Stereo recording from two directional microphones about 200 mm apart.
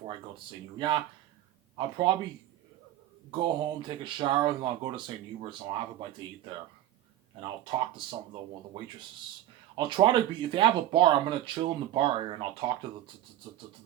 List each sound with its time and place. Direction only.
0.3 s speech: 25° right (ahead or behind)
2.0 s speech: 25° right (ahead or behind)
3.3 s speech: 25° right (ahead or behind)
7.4 s speech: 25° right (ahead or behind)
9.7 s speech: 25° right (ahead or behind)